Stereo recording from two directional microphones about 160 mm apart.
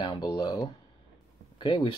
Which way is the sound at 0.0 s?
25° left (ahead or behind).